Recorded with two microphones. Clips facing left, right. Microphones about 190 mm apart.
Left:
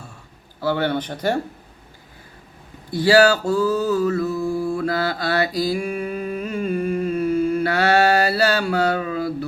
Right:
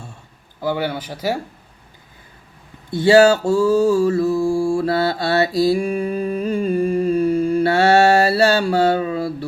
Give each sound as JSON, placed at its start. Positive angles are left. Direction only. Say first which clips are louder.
{"t": 0.6, "sound": "speech", "louder": "left 1 dB", "side_deg": -10}
{"t": 2.9, "sound": "mantra", "louder": "right 3 dB", "side_deg": -25}